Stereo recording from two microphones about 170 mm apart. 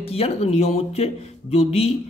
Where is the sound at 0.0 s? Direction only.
35° left (ahead or behind).